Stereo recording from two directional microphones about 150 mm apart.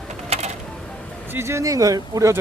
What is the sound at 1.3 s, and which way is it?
Speech, 15° right (ahead or behind).